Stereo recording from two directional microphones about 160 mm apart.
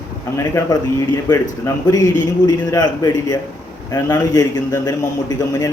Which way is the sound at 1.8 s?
20° left (ahead or behind).